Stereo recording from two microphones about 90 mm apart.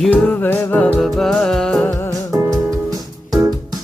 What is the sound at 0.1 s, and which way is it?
Music, 15° left (ahead or behind).